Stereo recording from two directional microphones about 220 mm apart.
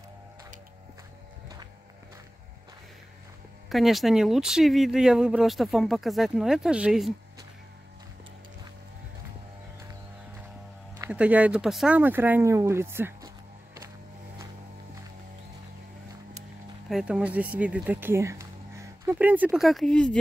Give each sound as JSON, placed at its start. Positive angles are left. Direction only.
{"t": 3.6, "sound": "speech", "side_deg": 0}
{"t": 11.0, "sound": "speech", "side_deg": -5}
{"t": 16.9, "sound": "speech", "side_deg": -5}